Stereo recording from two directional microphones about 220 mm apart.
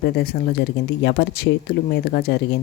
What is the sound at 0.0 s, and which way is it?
Speech, 45° left (ahead or behind).